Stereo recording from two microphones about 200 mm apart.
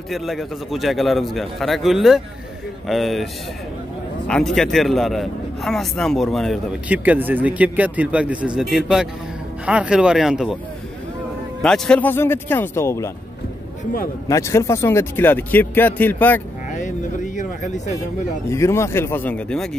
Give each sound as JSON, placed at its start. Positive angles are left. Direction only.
{"t": 0.1, "sound": "a man's voice", "side_deg": 0}
{"t": 4.3, "sound": "a man's voice", "side_deg": 0}
{"t": 11.6, "sound": "speech", "side_deg": 5}
{"t": 14.3, "sound": "speech", "side_deg": 15}
{"t": 16.7, "sound": "a sound", "side_deg": 40}
{"t": 18.5, "sound": "speech", "side_deg": 15}